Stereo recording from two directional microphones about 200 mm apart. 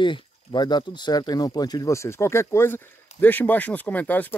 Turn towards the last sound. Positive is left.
turn(degrees=10)  # may be behind; listen again after turning